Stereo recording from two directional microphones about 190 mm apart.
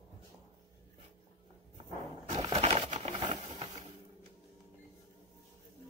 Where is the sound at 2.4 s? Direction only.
30° right (ahead or behind).